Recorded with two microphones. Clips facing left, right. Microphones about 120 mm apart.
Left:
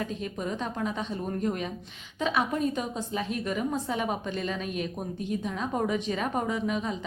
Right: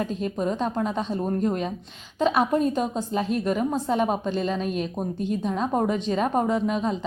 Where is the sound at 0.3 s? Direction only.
35° right (ahead or behind).